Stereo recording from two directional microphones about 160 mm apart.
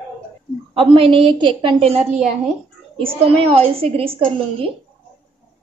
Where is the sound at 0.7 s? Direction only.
35° right (ahead or behind).